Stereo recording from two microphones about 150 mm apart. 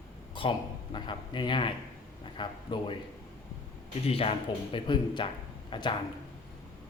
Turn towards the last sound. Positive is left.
turn(degrees=30)  # may be behind; listen again after turning